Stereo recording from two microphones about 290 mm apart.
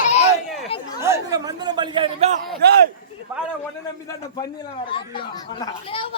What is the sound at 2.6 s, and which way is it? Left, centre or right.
Speech, right.